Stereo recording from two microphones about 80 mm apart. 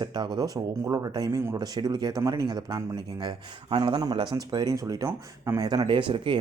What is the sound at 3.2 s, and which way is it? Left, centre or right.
Speech, right.